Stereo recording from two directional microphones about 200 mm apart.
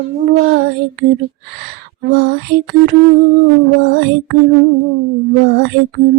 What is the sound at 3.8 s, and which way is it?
Music, 60° right (ahead or behind).